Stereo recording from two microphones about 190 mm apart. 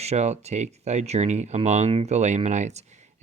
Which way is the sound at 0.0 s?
35° right (ahead or behind).